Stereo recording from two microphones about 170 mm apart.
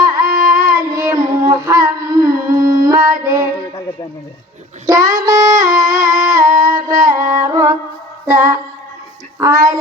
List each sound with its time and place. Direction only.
0.3 s child singing: 25° right (ahead or behind)
2.7 s female singing: 20° right (ahead or behind)
4.9 s a sound: 20° right (ahead or behind)
9.4 s child singing: 20° right (ahead or behind)